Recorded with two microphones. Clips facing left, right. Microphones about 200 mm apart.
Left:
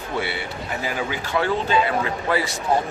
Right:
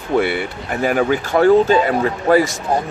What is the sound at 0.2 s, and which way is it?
Speech, 55° right (ahead or behind).